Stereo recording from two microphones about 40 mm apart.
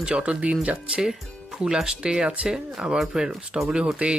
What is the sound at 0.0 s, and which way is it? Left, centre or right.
Speech, right.